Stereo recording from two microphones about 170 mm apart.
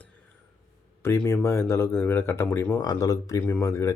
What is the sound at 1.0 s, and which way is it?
Speech, 15° left (ahead or behind).